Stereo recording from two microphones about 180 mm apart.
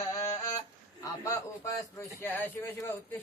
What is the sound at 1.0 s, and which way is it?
Speech, 20° left (ahead or behind).